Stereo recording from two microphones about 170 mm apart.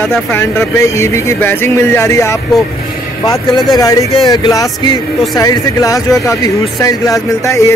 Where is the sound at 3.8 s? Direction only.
20° left (ahead or behind).